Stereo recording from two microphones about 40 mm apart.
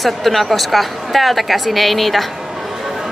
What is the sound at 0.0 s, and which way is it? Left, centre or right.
A woman's voice, centre.